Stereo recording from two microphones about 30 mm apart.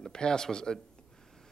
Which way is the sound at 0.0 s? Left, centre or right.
Left.